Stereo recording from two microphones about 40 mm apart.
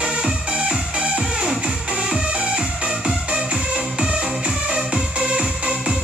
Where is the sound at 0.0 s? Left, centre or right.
Right.